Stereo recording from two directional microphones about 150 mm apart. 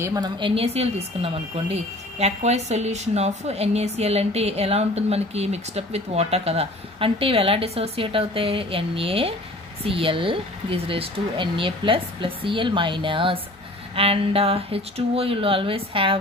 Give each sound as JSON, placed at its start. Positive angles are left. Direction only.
{"t": 0.0, "sound": "a woman's voice", "side_deg": -20}
{"t": 0.4, "sound": "a woman's voice", "side_deg": -35}